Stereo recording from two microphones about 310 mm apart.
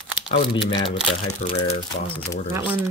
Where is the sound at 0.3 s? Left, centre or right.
Centre.